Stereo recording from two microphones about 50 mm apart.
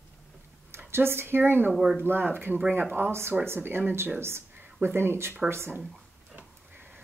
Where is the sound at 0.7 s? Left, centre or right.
Right.